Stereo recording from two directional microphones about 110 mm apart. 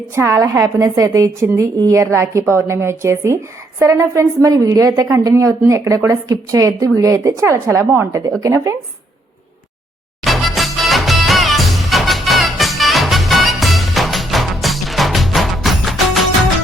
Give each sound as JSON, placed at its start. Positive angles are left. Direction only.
{"t": 0.1, "sound": "a woman's voice", "side_deg": -25}
{"t": 10.2, "sound": "music", "side_deg": 0}